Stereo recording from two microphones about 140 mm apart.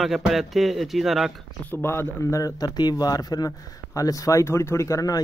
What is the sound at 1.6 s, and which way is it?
Speech, 15° left (ahead or behind).